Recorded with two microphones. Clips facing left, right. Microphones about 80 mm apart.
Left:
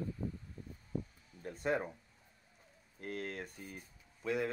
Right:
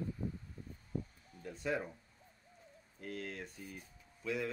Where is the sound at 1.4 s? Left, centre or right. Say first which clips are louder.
Left 3 dB; left.